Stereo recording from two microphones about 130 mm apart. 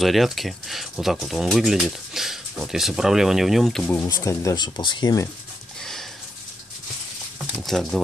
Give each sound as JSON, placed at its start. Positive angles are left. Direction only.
{"t": 0.0, "sound": "speech", "side_deg": 0}
{"t": 3.8, "sound": "speech", "side_deg": 20}
{"t": 7.6, "sound": "speech", "side_deg": 0}